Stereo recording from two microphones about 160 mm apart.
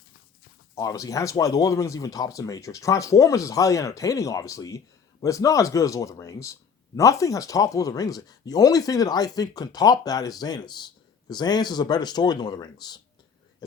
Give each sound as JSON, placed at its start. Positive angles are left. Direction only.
{"t": 0.8, "sound": "speech", "side_deg": 20}